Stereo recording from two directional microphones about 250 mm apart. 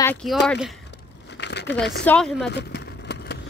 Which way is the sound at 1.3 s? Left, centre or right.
Left.